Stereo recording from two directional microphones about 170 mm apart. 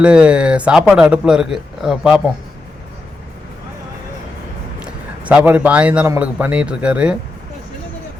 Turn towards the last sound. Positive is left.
turn(degrees=-5)  # may be behind; listen again after turning